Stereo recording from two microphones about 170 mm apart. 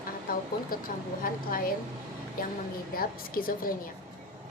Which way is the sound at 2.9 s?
55° left (ahead or behind).